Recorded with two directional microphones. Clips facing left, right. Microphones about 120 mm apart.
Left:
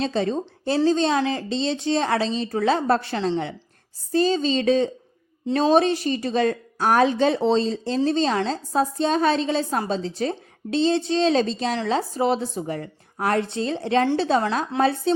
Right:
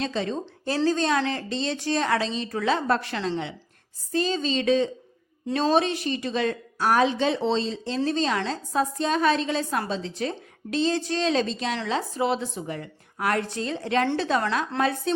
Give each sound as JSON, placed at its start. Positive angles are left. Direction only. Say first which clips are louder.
{"t": 0.0, "sound": "speech", "louder": "left 4 dB", "side_deg": 35}